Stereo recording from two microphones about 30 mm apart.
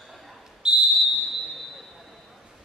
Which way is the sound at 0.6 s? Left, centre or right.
Right.